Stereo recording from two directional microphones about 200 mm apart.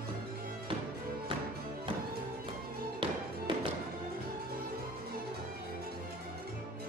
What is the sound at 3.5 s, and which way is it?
Music, 25° right (ahead or behind).